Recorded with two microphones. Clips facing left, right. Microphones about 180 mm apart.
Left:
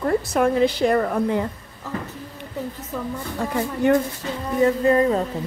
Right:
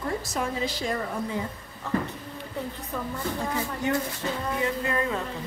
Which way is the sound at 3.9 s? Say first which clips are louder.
Left 9 dB; 55° left (ahead or behind).